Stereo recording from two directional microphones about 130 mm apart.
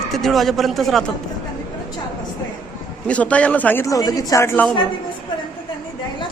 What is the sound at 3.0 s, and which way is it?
Speech, 10° left (ahead or behind).